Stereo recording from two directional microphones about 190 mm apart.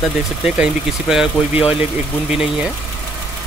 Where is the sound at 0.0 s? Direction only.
5° right (ahead or behind).